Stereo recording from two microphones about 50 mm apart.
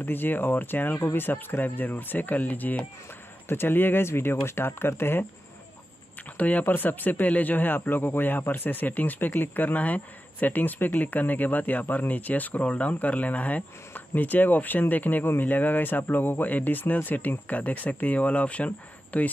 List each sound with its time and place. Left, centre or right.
0.0 s speech: left
6.3 s speech: left
6.6 s speech: left